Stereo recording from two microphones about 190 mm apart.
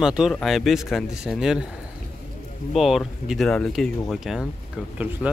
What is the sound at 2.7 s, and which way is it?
Speech, centre (ahead or behind).